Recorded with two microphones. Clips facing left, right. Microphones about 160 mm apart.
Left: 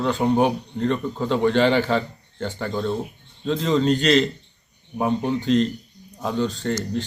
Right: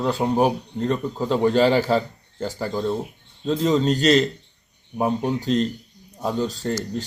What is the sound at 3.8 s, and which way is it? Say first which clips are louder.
Speech: left 1 dB; 40° right (ahead or behind).